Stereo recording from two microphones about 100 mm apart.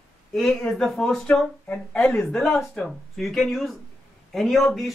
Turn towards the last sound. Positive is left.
turn(degrees=0)  # may be behind; listen again after turning